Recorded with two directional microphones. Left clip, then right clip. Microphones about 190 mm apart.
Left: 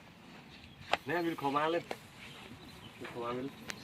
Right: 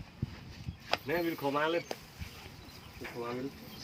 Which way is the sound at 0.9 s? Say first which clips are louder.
Right 1 dB; 5° right (ahead or behind).